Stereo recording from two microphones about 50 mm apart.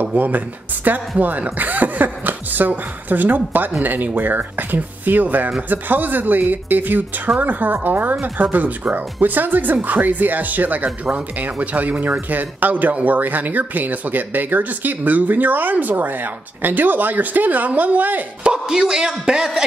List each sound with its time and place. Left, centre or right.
0.0 s speech: right
18.4 s speech: centre